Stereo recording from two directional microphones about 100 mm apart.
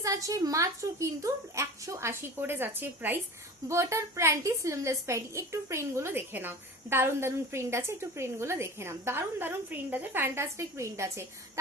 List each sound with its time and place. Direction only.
0.0 s a woman's voice: 35° right (ahead or behind)